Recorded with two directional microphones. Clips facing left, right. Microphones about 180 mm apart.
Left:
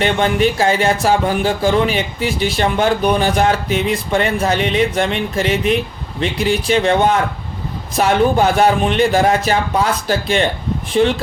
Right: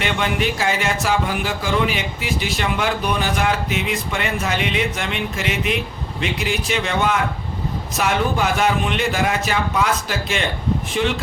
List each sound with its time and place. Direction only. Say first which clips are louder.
0.0 s speech: left 6 dB; 35° left (ahead or behind)